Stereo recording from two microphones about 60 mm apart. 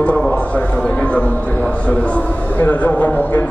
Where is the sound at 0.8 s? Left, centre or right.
Left.